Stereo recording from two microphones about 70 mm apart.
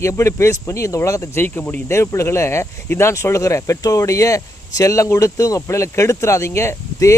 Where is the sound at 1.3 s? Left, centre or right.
Left.